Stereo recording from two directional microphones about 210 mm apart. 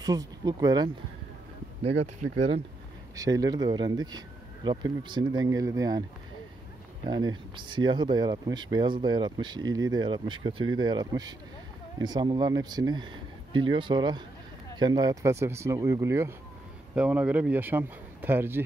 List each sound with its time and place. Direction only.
0.0 s a man's voice: 20° right (ahead or behind)
1.8 s speech: 30° right (ahead or behind)
3.2 s speech: 15° right (ahead or behind)
7.1 s a man's voice: 20° right (ahead or behind)